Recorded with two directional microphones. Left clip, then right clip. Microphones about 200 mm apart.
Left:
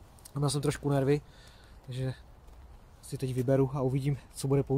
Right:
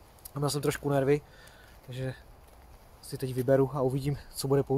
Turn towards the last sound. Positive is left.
turn(degrees=0)  # may be behind; listen again after turning